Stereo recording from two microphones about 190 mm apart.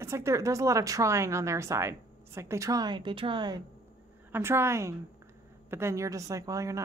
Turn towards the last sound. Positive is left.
turn(degrees=-15)  # may be behind; listen again after turning